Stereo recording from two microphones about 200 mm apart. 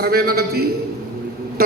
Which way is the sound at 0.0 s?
50° right (ahead or behind).